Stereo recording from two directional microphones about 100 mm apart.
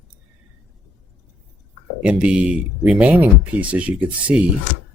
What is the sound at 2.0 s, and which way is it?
Speech, 10° right (ahead or behind).